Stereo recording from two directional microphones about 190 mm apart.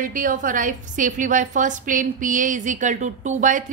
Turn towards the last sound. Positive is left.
turn(degrees=-40)  # may be behind; listen again after turning